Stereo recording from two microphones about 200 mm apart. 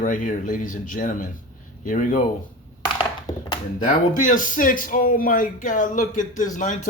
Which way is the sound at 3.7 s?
40° left (ahead or behind).